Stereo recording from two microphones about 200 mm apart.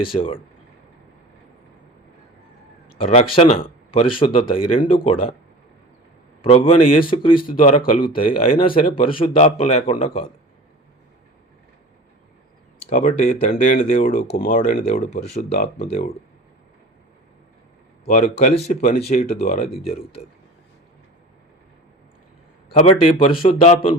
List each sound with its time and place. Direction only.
0.0 s speech: 25° left (ahead or behind)
3.0 s speech: 30° left (ahead or behind)
6.4 s speech: 30° left (ahead or behind)
7.4 s a man's voice: 40° left (ahead or behind)
12.9 s a man's voice: 40° left (ahead or behind)
15.8 s a man's voice: 30° left (ahead or behind)
18.0 s a man's voice: 35° left (ahead or behind)
19.3 s speech: 50° left (ahead or behind)
19.7 s speech: 30° left (ahead or behind)
22.7 s speech: 35° left (ahead or behind)